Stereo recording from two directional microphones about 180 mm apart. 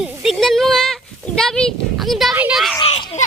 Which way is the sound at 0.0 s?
Centre (ahead or behind).